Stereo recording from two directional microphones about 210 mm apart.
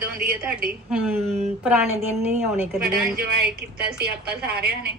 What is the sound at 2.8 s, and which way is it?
A woman's voice, 50° right (ahead or behind).